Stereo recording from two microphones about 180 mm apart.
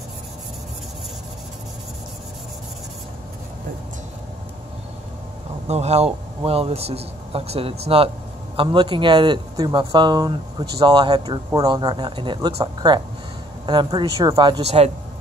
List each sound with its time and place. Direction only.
5.7 s a man's voice: 35° right (ahead or behind)